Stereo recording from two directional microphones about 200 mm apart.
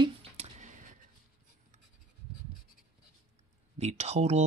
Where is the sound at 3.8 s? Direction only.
35° right (ahead or behind).